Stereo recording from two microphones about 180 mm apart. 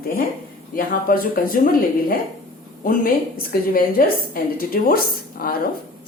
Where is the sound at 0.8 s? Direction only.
55° left (ahead or behind).